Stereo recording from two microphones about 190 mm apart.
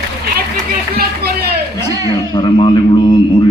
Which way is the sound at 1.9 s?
20° left (ahead or behind).